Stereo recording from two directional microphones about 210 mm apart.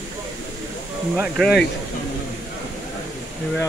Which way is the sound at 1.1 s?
Centre (ahead or behind).